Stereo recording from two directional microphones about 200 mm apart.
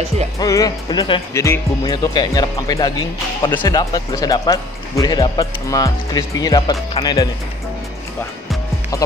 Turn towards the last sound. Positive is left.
turn(degrees=20)  # may be behind; listen again after turning